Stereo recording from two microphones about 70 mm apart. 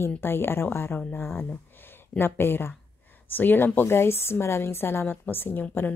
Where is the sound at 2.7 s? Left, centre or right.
Left.